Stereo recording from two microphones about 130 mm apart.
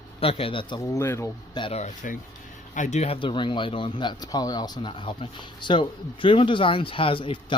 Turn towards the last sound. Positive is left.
turn(degrees=40)  # may be behind; listen again after turning